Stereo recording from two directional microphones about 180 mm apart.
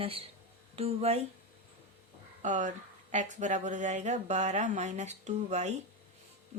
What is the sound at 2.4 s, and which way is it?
A woman's voice, 45° right (ahead or behind).